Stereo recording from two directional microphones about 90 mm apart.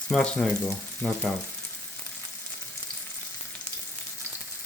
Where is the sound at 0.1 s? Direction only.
10° left (ahead or behind).